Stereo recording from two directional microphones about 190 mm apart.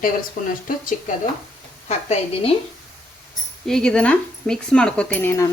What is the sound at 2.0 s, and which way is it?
Speech, 30° left (ahead or behind).